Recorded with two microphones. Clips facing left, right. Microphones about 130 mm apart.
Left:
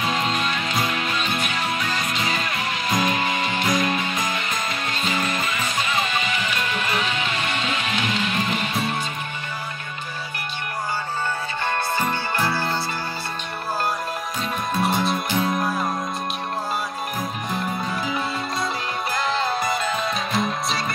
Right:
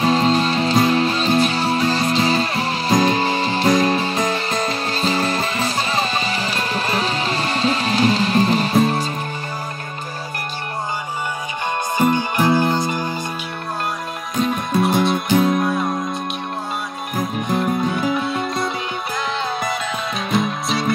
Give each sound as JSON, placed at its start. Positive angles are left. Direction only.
{"t": 0.0, "sound": "music", "side_deg": -30}
{"t": 12.0, "sound": "music", "side_deg": -15}
{"t": 14.4, "sound": "music", "side_deg": 0}
{"t": 17.5, "sound": "music", "side_deg": 0}